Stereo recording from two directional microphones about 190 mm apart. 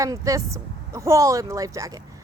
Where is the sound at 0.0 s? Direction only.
15° right (ahead or behind).